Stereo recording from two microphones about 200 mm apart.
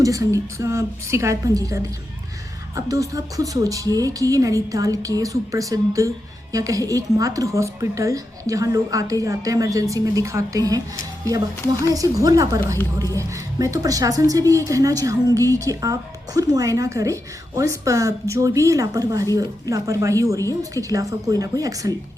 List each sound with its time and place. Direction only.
0.0 s a woman's voice: 15° right (ahead or behind)
11.9 s a woman's voice: 15° right (ahead or behind)